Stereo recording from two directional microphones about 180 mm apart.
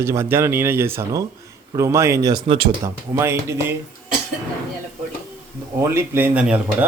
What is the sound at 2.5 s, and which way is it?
Speech, 30° right (ahead or behind).